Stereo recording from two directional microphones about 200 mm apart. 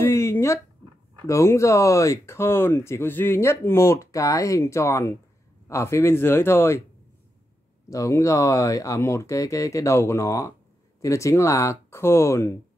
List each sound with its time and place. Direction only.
0.0 s a sound: 15° left (ahead or behind)
1.2 s speech: 15° left (ahead or behind)
7.9 s speech: 15° left (ahead or behind)